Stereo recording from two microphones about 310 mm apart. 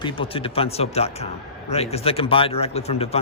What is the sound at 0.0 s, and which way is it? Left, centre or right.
Speech, centre.